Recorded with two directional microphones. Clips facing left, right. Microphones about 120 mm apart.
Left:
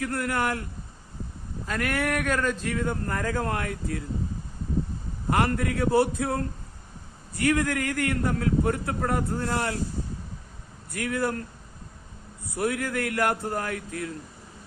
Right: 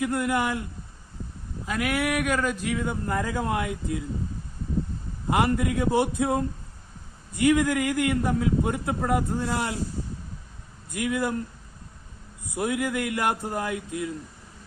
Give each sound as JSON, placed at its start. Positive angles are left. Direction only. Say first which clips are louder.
{"t": 0.0, "sound": "a man's voice", "louder": "right 2 dB", "side_deg": -20}
{"t": 1.6, "sound": "a man's voice", "louder": "right 1 dB", "side_deg": -10}
{"t": 5.3, "sound": "a man's voice", "louder": "right 1 dB", "side_deg": -15}
{"t": 10.9, "sound": "a man's voice", "louder": "right 1 dB", "side_deg": -15}
{"t": 12.5, "sound": "a man's voice", "louder": "right 1 dB", "side_deg": -20}